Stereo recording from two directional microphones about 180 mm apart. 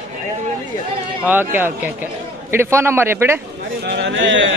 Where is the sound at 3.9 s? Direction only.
75° right (ahead or behind).